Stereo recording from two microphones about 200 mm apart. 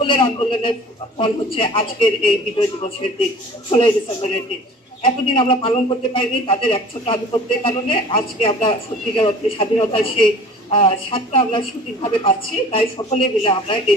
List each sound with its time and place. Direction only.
0.0 s a man's voice: 25° left (ahead or behind)